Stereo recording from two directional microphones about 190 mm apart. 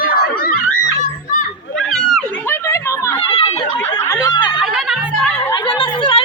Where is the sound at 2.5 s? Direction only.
15° left (ahead or behind).